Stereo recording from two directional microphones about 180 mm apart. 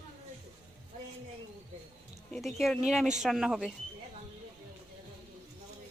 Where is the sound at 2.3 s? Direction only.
Centre (ahead or behind).